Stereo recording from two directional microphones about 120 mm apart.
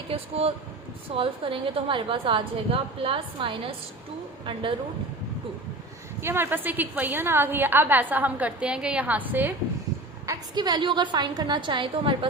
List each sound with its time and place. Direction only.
0.1 s a woman's voice: 55° right (ahead or behind)
6.2 s a woman's voice: 20° right (ahead or behind)
10.2 s a woman's voice: 35° right (ahead or behind)